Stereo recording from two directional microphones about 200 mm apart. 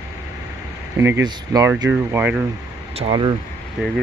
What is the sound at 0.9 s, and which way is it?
Speech, 10° right (ahead or behind).